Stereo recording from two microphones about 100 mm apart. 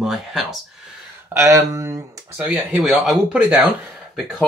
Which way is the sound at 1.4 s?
30° right (ahead or behind).